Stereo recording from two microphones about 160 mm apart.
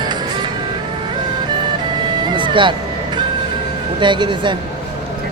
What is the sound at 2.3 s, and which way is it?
Vehicle, 30° right (ahead or behind).